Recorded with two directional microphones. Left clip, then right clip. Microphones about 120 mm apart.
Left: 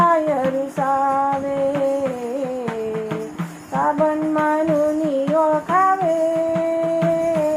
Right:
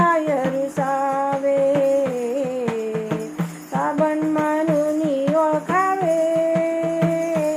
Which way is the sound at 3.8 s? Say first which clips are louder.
Left 2 dB; 30° left (ahead or behind).